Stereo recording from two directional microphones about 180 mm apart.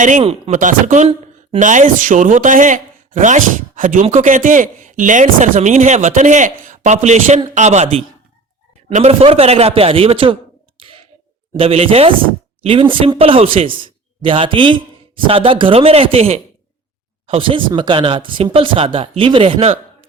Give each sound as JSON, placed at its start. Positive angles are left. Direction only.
{"t": 0.0, "sound": "a man's voice", "side_deg": -40}
{"t": 10.8, "sound": "a sound", "side_deg": -30}
{"t": 11.5, "sound": "a man's voice", "side_deg": -30}